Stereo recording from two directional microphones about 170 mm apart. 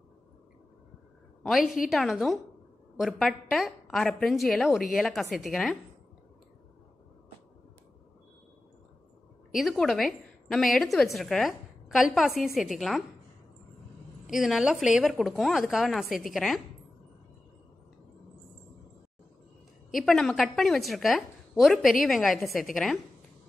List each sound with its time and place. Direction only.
1.4 s a woman's voice: centre (ahead or behind)
9.5 s a woman's voice: centre (ahead or behind)
14.3 s a woman's voice: centre (ahead or behind)
20.0 s a woman's voice: centre (ahead or behind)